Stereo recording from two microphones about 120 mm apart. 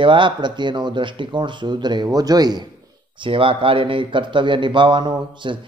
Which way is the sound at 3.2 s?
45° right (ahead or behind).